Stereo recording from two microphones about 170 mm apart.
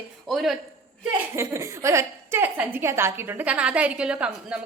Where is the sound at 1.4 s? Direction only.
15° right (ahead or behind).